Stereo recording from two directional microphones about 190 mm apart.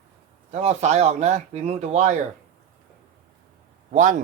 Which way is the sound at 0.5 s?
35° right (ahead or behind).